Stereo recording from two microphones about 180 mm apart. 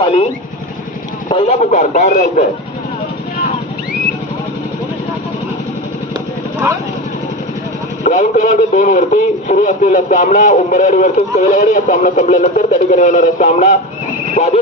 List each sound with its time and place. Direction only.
0.0 s speech: 30° left (ahead or behind)
1.3 s a man's voice: 35° left (ahead or behind)
8.0 s speech: 45° left (ahead or behind)